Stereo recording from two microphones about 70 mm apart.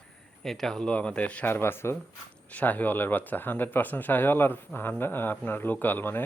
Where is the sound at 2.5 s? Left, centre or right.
Left.